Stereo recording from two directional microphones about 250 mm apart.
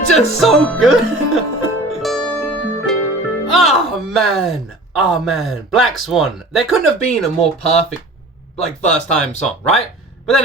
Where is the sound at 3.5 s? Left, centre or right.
Centre.